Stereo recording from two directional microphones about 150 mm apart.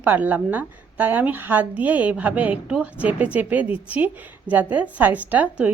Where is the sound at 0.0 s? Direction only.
10° right (ahead or behind).